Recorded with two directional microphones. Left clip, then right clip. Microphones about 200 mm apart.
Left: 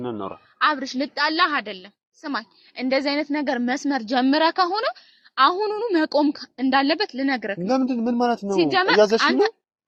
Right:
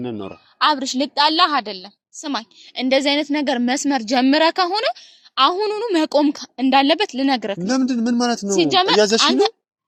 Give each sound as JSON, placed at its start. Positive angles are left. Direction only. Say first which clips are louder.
{"t": 0.0, "sound": "speech", "louder": "right 1 dB", "side_deg": -60}
{"t": 0.6, "sound": "a woman's voice", "louder": "right 4 dB", "side_deg": -45}
{"t": 7.7, "sound": "speech", "louder": "right 1 dB", "side_deg": -70}
{"t": 8.5, "sound": "a woman's voice", "louder": "right 2 dB", "side_deg": -35}